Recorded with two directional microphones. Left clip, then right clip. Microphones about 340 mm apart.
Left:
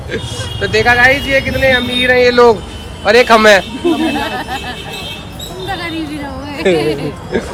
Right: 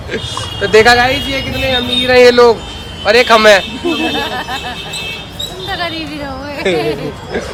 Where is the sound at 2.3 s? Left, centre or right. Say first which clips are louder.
Even; centre.